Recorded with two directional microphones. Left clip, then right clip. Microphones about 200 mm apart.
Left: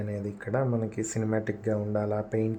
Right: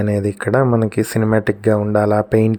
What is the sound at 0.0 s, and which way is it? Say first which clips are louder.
Speech: right 16 dB; 45° right (ahead or behind).